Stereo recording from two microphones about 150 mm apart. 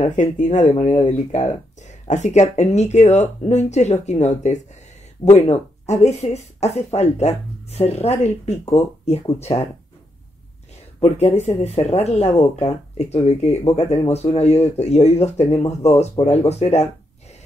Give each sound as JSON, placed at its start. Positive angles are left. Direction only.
{"t": 0.0, "sound": "speech", "side_deg": 55}
{"t": 11.0, "sound": "speech", "side_deg": 45}